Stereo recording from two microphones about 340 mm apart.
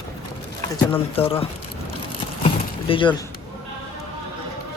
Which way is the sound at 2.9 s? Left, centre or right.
Centre.